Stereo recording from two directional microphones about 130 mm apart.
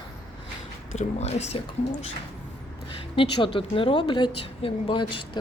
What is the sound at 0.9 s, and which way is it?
Speech, 60° left (ahead or behind).